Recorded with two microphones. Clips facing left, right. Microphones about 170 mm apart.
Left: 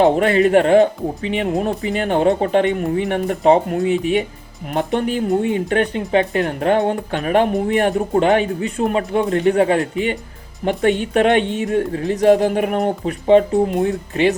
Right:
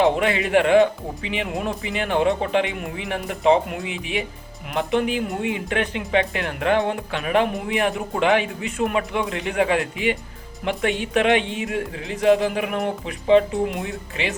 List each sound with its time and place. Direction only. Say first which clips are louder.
0.0 s speech: left 6 dB; 40° left (ahead or behind)